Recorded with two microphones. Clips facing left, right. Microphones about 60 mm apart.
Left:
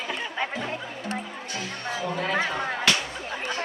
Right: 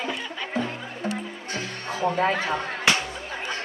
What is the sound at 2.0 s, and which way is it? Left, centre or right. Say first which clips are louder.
Speech: right 7 dB; right.